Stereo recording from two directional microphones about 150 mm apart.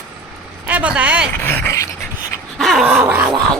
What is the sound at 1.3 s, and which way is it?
Speech, 10° left (ahead or behind).